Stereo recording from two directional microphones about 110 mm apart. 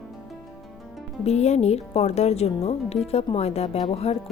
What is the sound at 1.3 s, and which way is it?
Speech, 85° left.